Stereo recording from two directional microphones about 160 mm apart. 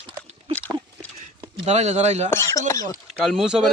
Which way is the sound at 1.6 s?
45° right (ahead or behind).